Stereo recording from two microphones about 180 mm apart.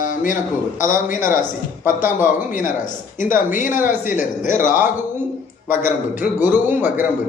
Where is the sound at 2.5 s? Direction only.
45° left (ahead or behind).